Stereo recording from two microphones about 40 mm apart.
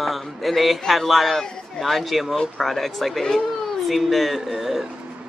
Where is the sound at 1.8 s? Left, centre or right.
Centre.